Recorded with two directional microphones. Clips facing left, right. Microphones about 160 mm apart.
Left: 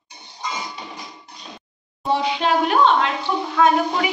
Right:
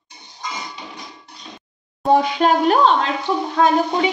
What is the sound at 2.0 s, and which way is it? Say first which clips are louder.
Speech: right 5 dB; 45° right (ahead or behind).